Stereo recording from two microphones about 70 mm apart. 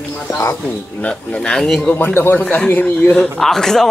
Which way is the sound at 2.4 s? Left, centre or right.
Left.